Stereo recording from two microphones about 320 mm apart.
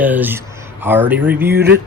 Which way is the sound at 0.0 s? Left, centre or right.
Centre.